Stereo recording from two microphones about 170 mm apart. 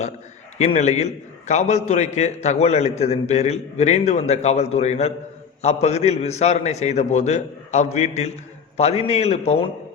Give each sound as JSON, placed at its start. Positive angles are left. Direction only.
{"t": 0.6, "sound": "a man's voice", "side_deg": 40}